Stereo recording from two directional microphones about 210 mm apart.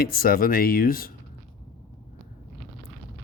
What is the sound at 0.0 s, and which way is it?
Speech, 45° left (ahead or behind).